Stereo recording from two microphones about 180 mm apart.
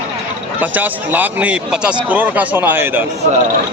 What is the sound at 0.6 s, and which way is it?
A man's voice, 10° right (ahead or behind).